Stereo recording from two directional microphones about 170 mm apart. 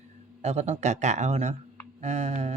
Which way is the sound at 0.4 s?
40° right (ahead or behind).